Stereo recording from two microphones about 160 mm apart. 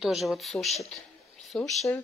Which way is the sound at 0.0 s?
Centre (ahead or behind).